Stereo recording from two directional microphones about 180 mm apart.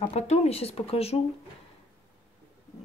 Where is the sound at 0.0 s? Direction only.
35° left (ahead or behind).